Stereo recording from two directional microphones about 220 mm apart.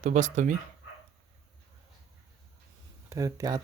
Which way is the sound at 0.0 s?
35° right (ahead or behind).